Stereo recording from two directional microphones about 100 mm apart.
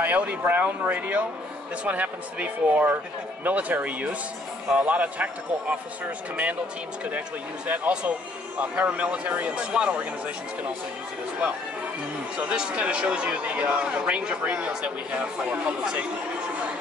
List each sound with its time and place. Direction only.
0.0 s speech: 15° right (ahead or behind)
7.1 s speech: 15° right (ahead or behind)
11.4 s speech: 15° right (ahead or behind)